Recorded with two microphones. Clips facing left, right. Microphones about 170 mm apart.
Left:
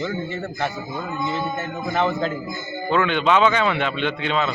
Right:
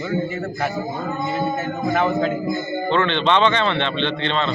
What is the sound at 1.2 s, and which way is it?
Speech, 40° right (ahead or behind).